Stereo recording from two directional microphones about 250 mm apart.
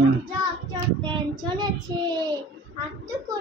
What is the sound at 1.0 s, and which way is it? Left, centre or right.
Child singing, centre.